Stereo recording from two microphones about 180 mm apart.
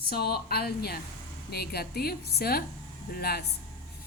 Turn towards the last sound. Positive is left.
turn(degrees=60)  # may be behind; listen again after turning